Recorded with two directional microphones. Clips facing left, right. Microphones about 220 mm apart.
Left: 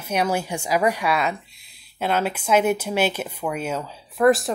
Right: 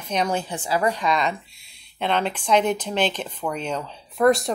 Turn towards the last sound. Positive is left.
turn(degrees=5)  # may be behind; listen again after turning